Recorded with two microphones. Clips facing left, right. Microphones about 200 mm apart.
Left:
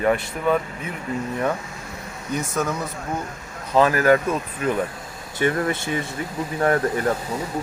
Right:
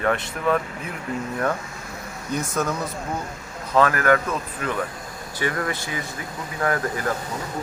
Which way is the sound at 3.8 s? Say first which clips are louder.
Left 2 dB; 25° left (ahead or behind).